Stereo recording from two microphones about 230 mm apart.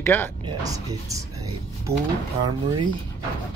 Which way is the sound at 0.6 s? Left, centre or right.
Centre.